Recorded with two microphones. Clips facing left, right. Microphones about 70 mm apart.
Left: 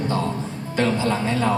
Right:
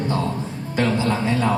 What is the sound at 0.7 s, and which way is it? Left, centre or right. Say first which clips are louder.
Speech: even; right.